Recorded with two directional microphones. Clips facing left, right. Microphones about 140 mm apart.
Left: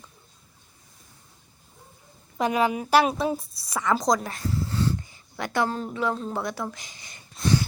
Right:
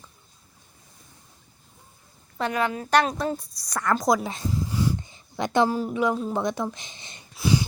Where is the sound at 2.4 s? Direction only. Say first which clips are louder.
Left 3 dB; 10° left (ahead or behind); by 4.2 s 5° right (ahead or behind).